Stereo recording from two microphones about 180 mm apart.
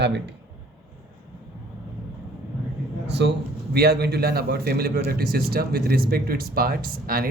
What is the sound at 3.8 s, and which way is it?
A man's voice, 60° right (ahead or behind).